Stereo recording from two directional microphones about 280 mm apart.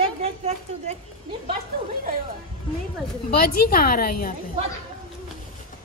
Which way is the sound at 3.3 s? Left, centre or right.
Left.